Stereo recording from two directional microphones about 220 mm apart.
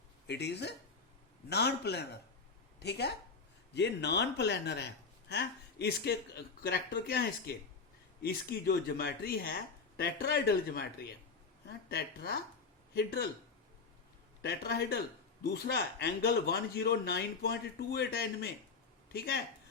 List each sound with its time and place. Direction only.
0.3 s speech: 50° left (ahead or behind)
14.4 s speech: 45° left (ahead or behind)